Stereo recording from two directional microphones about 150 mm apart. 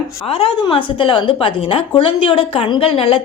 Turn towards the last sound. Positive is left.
turn(degrees=40)  # may be behind; listen again after turning